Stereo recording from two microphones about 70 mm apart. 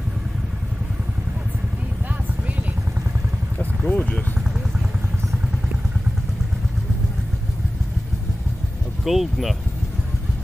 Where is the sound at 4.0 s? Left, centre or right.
Left.